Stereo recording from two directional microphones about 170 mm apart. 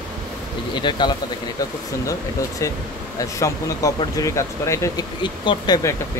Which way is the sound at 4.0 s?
20° left (ahead or behind).